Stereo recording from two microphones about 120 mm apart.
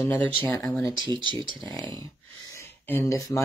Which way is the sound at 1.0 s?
40° right (ahead or behind).